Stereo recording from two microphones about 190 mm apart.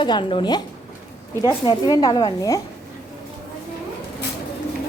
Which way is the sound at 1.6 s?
20° left (ahead or behind).